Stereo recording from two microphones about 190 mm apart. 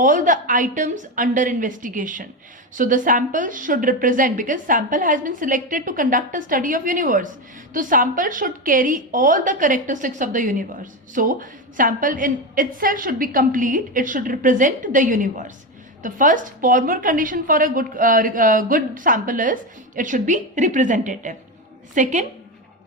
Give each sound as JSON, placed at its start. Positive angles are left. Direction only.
{"t": 0.0, "sound": "a woman's voice", "side_deg": -45}